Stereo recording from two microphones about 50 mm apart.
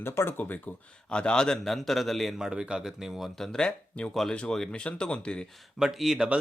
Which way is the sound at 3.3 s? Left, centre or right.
Centre.